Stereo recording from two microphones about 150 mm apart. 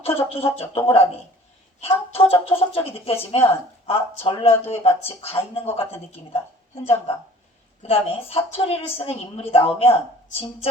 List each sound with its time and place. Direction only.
0.0 s speech: 40° left (ahead or behind)